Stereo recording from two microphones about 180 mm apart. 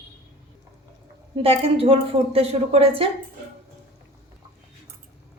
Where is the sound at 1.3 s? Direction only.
30° right (ahead or behind).